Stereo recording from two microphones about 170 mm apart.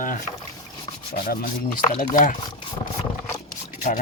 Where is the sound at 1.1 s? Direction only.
60° left (ahead or behind).